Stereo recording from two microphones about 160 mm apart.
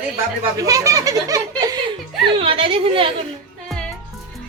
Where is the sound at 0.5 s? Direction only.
20° right (ahead or behind).